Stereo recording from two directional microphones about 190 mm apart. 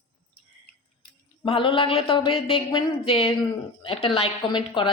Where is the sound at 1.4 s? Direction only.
30° left (ahead or behind).